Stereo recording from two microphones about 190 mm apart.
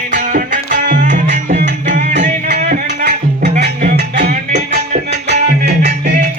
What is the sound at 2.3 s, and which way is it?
Music, 50° right (ahead or behind).